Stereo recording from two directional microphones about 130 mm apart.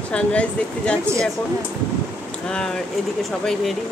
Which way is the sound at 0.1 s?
10° left (ahead or behind).